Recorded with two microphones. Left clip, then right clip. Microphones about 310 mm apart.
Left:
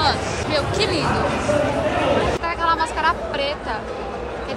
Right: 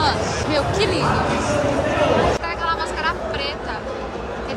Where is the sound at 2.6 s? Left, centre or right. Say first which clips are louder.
Left 4 dB; centre.